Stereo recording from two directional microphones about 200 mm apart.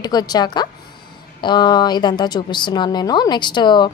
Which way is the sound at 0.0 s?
20° left (ahead or behind).